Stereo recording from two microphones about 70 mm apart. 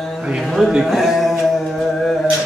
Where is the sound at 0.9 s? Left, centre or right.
Centre.